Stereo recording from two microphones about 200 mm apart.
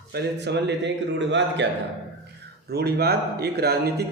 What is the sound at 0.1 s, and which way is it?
Speech, 55° right (ahead or behind).